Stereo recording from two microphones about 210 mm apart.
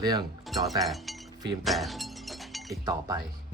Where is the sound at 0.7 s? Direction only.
Centre (ahead or behind).